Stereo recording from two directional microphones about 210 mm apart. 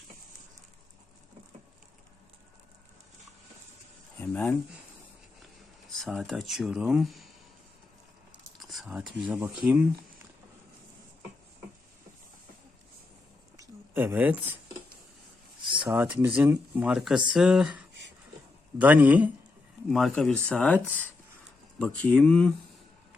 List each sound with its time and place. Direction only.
4.2 s speech: 10° left (ahead or behind)
6.0 s speech: centre (ahead or behind)
8.5 s a sound: centre (ahead or behind)
9.3 s speech: 10° right (ahead or behind)
13.6 s a sound: 10° right (ahead or behind)
15.8 s speech: 5° right (ahead or behind)